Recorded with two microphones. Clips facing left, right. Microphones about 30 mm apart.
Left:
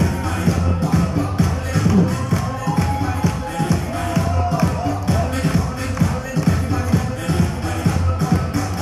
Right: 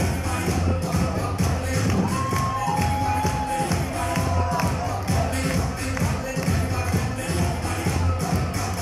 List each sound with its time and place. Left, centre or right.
0.0 s music: centre
1.8 s music: centre